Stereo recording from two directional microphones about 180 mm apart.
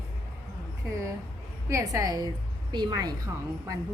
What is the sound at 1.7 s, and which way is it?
A woman's voice, 15° right (ahead or behind).